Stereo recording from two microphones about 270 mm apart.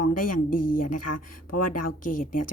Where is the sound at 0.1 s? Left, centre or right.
Left.